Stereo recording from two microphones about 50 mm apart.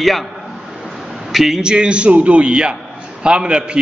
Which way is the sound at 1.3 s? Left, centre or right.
Centre.